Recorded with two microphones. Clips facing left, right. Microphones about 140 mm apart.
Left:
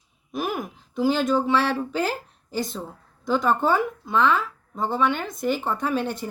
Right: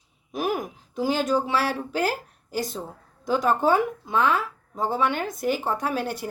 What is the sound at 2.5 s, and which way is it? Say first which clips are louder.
Speech: left 1 dB; 10° right (ahead or behind).